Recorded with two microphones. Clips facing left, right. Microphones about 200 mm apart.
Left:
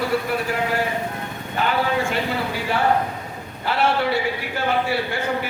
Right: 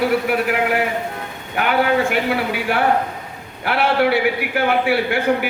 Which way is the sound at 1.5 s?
70° right (ahead or behind).